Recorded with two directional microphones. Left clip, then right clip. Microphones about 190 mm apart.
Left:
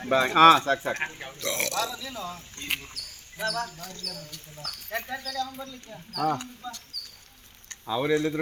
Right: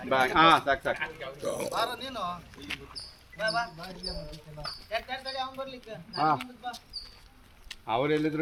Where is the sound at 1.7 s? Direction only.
10° right (ahead or behind).